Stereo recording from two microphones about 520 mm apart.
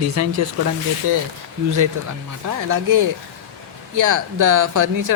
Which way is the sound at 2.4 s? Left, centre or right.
Right.